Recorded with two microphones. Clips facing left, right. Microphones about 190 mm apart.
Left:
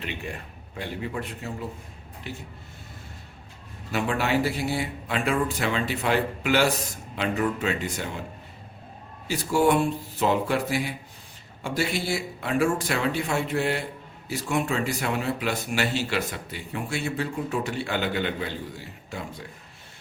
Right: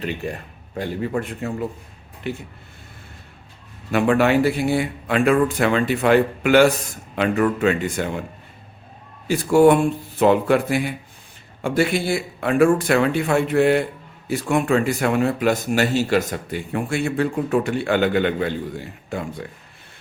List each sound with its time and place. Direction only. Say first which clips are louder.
0.0 s a man's voice: right 7 dB; 40° right (ahead or behind); by 2.4 s 60° right (ahead or behind)
3.9 s a man's voice: right 8 dB; 60° right (ahead or behind)
9.2 s a man's voice: right 8 dB; 55° right (ahead or behind)